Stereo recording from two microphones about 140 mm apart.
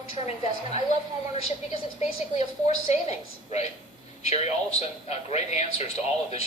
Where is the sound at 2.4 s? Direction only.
55° left (ahead or behind).